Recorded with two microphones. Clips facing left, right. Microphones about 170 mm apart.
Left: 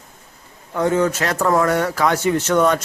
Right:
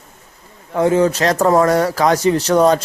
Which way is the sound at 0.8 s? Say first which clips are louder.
Right 4 dB; 25° right (ahead or behind).